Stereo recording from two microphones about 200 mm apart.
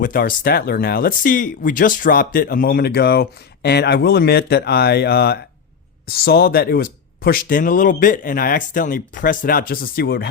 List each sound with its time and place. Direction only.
0.0 s speech: 45° left (ahead or behind)